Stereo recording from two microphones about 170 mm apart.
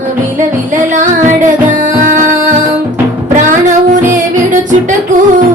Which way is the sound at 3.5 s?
50° right (ahead or behind).